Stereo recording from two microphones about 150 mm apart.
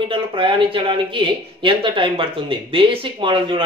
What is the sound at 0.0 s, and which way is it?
Speech, 35° right (ahead or behind).